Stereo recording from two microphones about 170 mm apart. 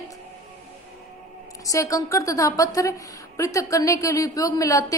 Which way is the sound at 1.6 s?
20° left (ahead or behind).